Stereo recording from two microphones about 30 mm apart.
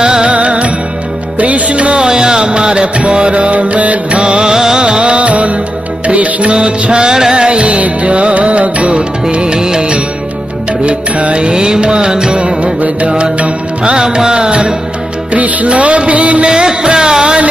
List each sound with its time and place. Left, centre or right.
0.0 s music: right
0.3 s music: right
2.0 s a sound: right
3.0 s music: right
4.1 s music: right
5.0 s music: right
6.5 s music: right
7.6 s music: right
10.9 s music: right
11.4 s music: right
13.2 s music: right
13.9 s music: right
15.3 s music: right
16.4 s music: right